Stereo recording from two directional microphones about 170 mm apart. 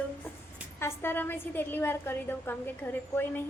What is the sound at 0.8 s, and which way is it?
A woman's voice, 15° left (ahead or behind).